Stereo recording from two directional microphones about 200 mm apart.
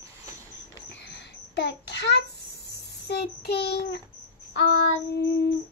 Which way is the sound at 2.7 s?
55° left (ahead or behind).